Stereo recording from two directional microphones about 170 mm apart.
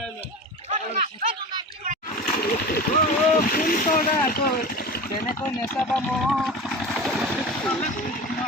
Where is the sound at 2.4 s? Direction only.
60° left (ahead or behind).